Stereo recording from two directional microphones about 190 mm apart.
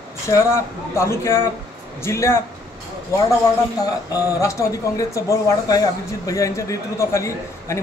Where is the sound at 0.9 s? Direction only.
15° left (ahead or behind).